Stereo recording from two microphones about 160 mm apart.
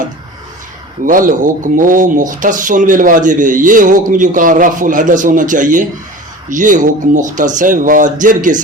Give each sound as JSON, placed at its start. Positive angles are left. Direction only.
{"t": 1.0, "sound": "speech", "side_deg": -55}